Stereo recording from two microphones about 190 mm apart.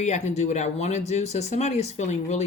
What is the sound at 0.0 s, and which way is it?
Speech, 35° left (ahead or behind).